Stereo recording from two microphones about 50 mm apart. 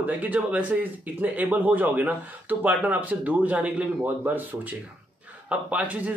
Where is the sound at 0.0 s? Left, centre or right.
Right.